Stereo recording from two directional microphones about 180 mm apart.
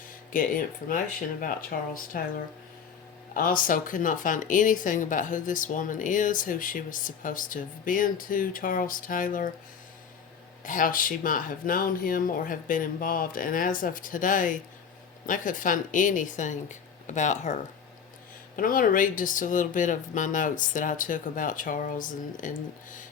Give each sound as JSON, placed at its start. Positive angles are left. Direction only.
{"t": 0.3, "sound": "speech", "side_deg": 50}
{"t": 3.3, "sound": "speech", "side_deg": 50}
{"t": 10.7, "sound": "speech", "side_deg": 50}